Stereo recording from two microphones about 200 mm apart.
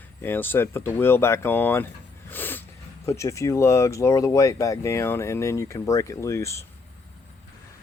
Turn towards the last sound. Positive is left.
turn(degrees=15)  # may be behind; listen again after turning